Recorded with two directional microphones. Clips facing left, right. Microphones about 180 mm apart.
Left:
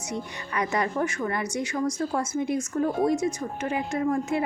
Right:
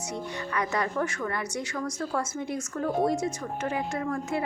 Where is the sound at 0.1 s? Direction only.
15° left (ahead or behind).